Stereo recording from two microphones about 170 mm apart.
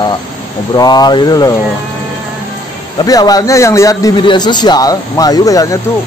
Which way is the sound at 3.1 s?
20° left (ahead or behind).